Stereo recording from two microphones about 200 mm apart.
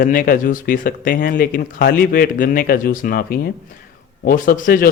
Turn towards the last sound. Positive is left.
turn(degrees=45)  # may be behind; listen again after turning